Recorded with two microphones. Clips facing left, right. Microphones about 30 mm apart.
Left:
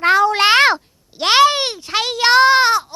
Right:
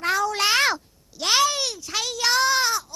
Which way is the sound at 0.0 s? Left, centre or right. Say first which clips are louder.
Left 9 dB; left.